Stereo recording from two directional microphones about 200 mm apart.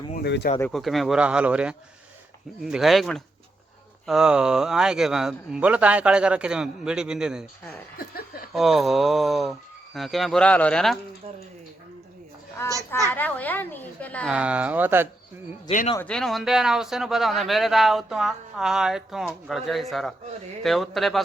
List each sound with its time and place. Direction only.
0.2 s speech: 60° left (ahead or behind)
0.7 s speech: centre (ahead or behind)
7.9 s chuckle: 50° left (ahead or behind)
8.5 s speech: centre (ahead or behind)
13.1 s a woman's voice: 10° left (ahead or behind)
14.3 s speech: 5° right (ahead or behind)
16.0 s speech: 5° left (ahead or behind)